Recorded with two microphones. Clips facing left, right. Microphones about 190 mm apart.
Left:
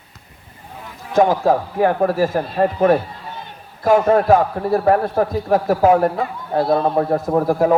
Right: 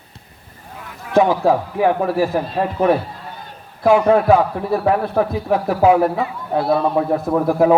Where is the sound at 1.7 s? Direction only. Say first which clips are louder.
Even; 50° left (ahead or behind).